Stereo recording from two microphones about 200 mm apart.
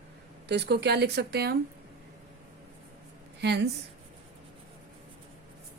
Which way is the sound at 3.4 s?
60° right (ahead or behind).